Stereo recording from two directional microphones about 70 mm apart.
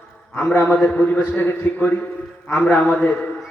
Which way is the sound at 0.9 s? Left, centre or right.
Centre.